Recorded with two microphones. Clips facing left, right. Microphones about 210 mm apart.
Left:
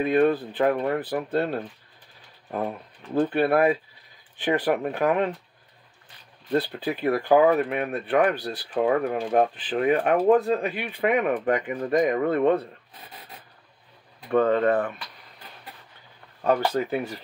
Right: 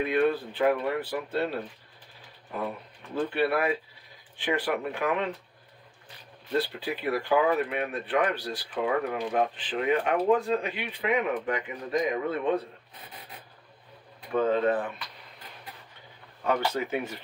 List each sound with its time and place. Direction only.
0.0 s speech: 45° left (ahead or behind)
3.2 s speech: 50° left (ahead or behind)
4.6 s speech: 45° left (ahead or behind)
6.8 s speech: 45° left (ahead or behind)
14.3 s speech: 60° left (ahead or behind)
16.4 s speech: 35° left (ahead or behind)